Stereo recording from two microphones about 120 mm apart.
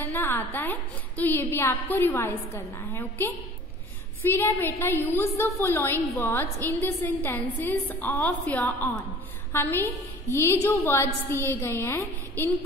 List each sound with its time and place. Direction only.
0.0 s a woman's voice: 15° left (ahead or behind)